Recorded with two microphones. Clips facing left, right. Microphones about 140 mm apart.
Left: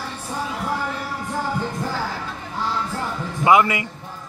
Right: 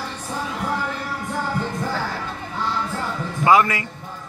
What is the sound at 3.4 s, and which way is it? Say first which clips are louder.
Speech: even; 15° left (ahead or behind).